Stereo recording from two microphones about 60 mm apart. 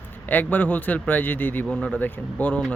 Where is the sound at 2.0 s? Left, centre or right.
Left.